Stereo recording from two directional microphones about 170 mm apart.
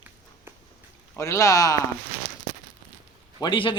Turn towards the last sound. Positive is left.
turn(degrees=30)  # may be behind; listen again after turning